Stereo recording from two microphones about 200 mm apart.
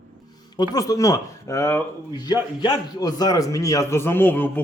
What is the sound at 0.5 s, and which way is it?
Speech, 20° left (ahead or behind).